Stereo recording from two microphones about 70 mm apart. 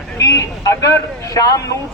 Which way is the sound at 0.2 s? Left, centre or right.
Left.